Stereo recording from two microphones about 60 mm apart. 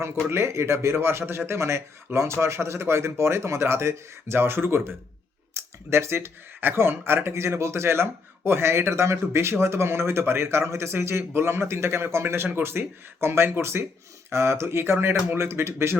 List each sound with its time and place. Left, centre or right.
0.3 s speech: right
12.5 s speech: right